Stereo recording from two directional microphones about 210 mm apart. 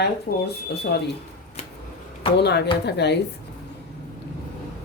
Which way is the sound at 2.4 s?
50° left (ahead or behind).